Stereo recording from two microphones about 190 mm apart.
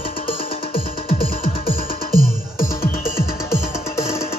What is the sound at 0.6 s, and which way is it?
Music, 30° left (ahead or behind).